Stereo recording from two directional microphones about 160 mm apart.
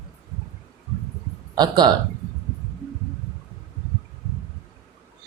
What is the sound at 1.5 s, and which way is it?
Speech, 25° right (ahead or behind).